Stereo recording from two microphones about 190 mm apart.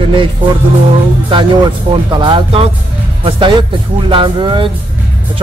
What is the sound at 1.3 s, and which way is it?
Speech, 25° right (ahead or behind).